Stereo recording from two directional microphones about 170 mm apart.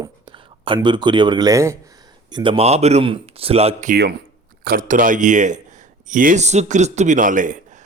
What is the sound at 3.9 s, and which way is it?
Speech, 70° right (ahead or behind).